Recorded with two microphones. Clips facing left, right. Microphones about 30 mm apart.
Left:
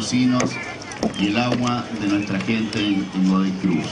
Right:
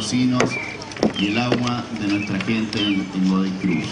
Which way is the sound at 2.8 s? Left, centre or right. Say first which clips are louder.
Left 1 dB; centre.